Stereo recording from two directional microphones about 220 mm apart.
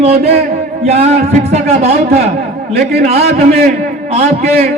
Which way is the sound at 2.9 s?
45° right (ahead or behind).